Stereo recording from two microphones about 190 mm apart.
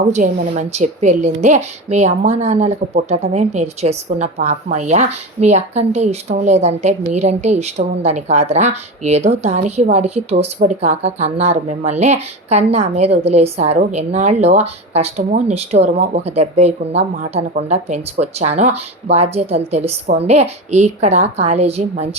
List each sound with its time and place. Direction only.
0.1 s a woman's voice: 35° right (ahead or behind)